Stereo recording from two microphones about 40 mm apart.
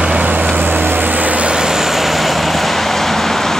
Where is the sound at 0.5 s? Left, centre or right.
Right.